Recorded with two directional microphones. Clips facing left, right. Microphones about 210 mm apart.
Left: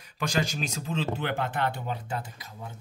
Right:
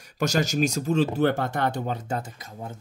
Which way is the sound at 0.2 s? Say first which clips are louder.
Right 6 dB; 45° right (ahead or behind).